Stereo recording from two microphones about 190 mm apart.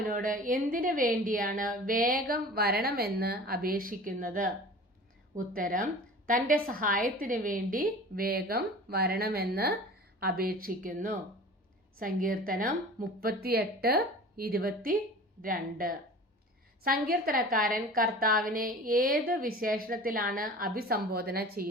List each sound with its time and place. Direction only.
0.1 s a woman's voice: 45° right (ahead or behind)